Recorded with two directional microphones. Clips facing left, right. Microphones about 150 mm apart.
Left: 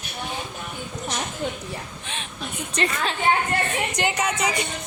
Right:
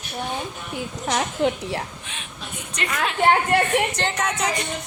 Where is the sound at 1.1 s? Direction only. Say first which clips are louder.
Right 8 dB; 85° right.